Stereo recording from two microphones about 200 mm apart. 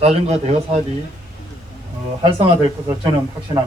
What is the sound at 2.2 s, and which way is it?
Speech, 25° right (ahead or behind).